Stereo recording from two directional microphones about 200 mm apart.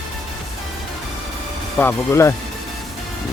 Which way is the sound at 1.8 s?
10° left (ahead or behind).